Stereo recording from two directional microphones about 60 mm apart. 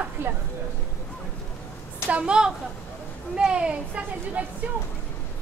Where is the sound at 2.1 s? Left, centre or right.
Centre.